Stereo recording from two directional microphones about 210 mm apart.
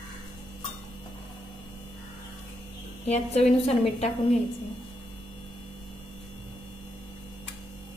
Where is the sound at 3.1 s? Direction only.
30° left (ahead or behind).